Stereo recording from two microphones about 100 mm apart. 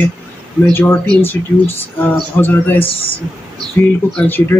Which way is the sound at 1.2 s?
20° left (ahead or behind).